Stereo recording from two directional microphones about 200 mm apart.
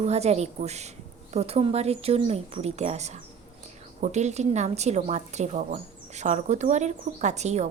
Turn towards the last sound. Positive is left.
turn(degrees=-35)  # may be behind; listen again after turning